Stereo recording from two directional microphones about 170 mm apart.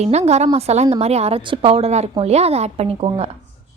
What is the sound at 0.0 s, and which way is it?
A woman's voice, 40° right (ahead or behind).